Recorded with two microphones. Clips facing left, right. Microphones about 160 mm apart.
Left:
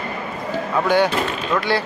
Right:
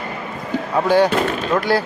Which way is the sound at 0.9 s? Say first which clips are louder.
Right 3 dB; 35° right (ahead or behind).